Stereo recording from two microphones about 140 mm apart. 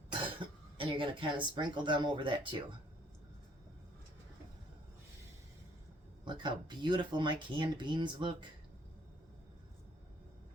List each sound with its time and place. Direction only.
0.1 s speech: 35° right (ahead or behind)
6.2 s speech: 35° right (ahead or behind)